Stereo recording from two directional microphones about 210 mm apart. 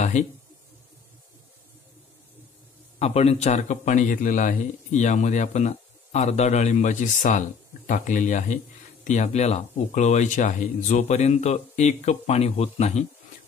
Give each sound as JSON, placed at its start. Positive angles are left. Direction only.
{"t": 3.0, "sound": "a man's voice", "side_deg": 30}